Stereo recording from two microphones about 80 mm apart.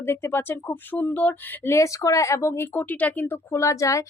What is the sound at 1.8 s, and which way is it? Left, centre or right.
Speech, left.